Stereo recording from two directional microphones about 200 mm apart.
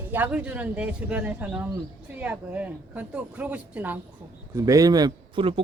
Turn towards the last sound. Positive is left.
turn(degrees=-25)  # may be behind; listen again after turning